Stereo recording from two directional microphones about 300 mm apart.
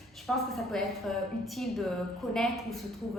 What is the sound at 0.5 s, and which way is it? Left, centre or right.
A woman's voice, centre.